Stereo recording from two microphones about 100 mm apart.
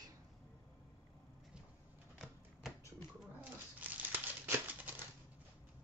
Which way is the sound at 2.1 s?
5° right (ahead or behind).